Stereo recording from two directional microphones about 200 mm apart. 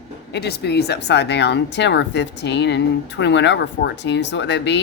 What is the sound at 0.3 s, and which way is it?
Speech, 55° left (ahead or behind).